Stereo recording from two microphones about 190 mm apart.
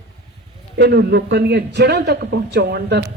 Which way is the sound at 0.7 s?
65° right (ahead or behind).